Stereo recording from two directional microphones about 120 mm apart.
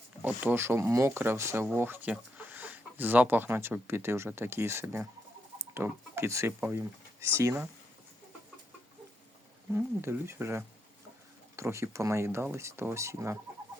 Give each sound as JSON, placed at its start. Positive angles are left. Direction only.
{"t": 0.2, "sound": "speech", "side_deg": -15}
{"t": 9.7, "sound": "speech", "side_deg": -20}